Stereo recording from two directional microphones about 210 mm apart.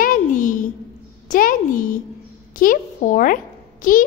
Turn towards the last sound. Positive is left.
turn(degrees=40)  # may be behind; listen again after turning